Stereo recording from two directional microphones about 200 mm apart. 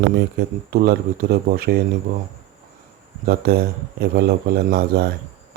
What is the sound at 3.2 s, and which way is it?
Speech, 50° right (ahead or behind).